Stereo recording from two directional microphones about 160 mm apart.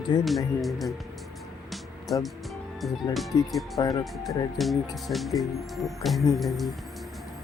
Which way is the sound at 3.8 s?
20° left (ahead or behind).